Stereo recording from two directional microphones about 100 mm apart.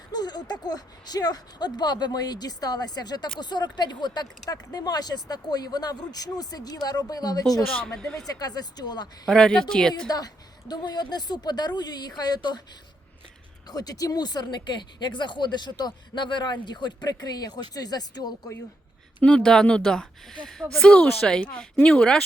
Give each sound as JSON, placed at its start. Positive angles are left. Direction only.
{"t": 0.1, "sound": "speech", "side_deg": 45}
{"t": 7.7, "sound": "speech", "side_deg": 10}
{"t": 8.3, "sound": "speech", "side_deg": 40}
{"t": 9.2, "sound": "speech", "side_deg": 5}
{"t": 10.1, "sound": "speech", "side_deg": 40}
{"t": 13.7, "sound": "speech", "side_deg": 40}
{"t": 19.2, "sound": "speech", "side_deg": 10}